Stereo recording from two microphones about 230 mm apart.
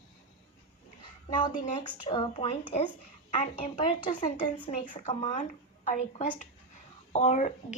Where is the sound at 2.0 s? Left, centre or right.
Left.